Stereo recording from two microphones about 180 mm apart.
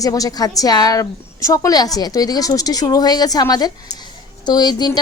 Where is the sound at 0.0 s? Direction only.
20° left (ahead or behind).